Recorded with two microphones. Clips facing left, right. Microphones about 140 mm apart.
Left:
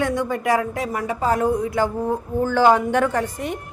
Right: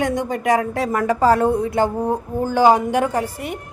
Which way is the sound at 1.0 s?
80° right.